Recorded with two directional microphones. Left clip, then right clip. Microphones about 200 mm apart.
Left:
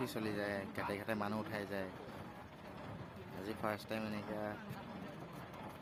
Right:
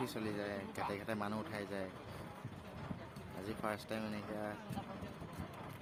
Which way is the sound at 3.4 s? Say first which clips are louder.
Left 1 dB; centre (ahead or behind).